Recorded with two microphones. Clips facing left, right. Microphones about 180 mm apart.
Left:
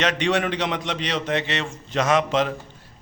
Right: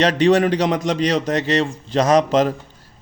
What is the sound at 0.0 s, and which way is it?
A man's voice, 35° right (ahead or behind).